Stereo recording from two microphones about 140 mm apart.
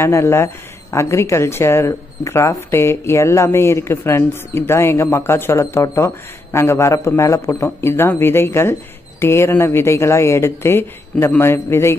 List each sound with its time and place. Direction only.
0.0 s speech: 20° left (ahead or behind)